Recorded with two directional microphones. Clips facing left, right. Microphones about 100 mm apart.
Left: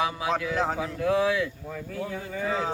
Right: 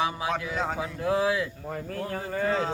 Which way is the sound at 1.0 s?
30° right (ahead or behind).